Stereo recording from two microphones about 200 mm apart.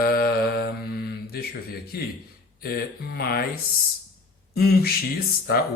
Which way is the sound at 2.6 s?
50° left (ahead or behind).